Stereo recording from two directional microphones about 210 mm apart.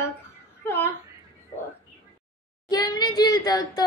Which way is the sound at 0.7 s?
10° left (ahead or behind).